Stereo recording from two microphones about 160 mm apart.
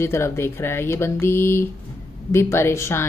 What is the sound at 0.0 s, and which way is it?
A woman's voice, 15° left (ahead or behind).